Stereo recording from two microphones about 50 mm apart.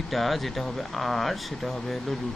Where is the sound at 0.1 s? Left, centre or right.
Centre.